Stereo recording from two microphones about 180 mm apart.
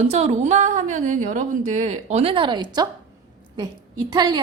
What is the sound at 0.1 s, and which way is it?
A woman's voice, 35° right (ahead or behind).